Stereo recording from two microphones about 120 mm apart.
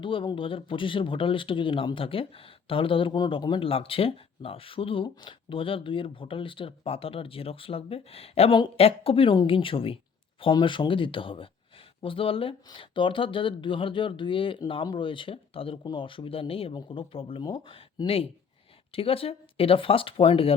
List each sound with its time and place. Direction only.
0.0 s speech: 45° left (ahead or behind)